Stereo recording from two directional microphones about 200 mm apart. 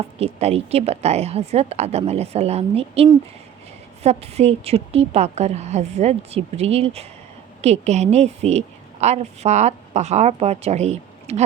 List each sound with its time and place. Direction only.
0.2 s a woman's voice: 30° right (ahead or behind)